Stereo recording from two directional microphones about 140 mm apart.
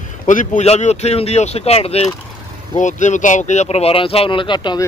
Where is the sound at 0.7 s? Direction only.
50° left (ahead or behind).